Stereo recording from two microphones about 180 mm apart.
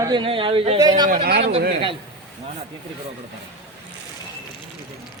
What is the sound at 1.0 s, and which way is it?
Speech, 55° right (ahead or behind).